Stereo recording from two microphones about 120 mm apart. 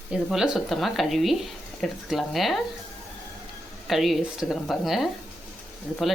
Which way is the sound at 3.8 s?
Centre (ahead or behind).